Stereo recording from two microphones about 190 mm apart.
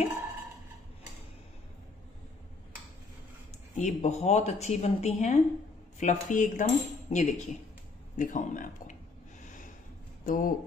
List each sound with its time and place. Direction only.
3.7 s speech: 35° left (ahead or behind)
10.2 s speech: 45° left (ahead or behind)